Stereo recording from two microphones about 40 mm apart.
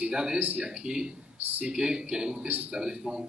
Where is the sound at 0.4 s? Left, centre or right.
Right.